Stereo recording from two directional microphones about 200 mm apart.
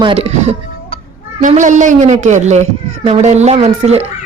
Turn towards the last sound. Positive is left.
turn(degrees=-30)  # may be behind; listen again after turning